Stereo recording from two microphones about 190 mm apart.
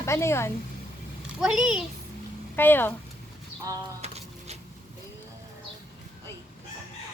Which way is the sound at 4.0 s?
35° right (ahead or behind).